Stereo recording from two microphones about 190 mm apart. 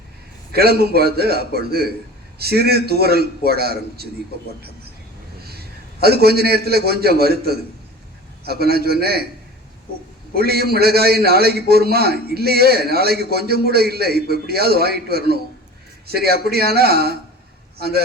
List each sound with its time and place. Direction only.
0.5 s a man's voice: 55° right (ahead or behind)
5.5 s a sound: 55° right (ahead or behind)
6.2 s a man's voice: 55° right (ahead or behind)
10.3 s a man's voice: 55° right (ahead or behind)
16.5 s a man's voice: 55° right (ahead or behind)